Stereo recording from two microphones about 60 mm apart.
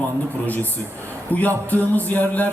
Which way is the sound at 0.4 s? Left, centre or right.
Left.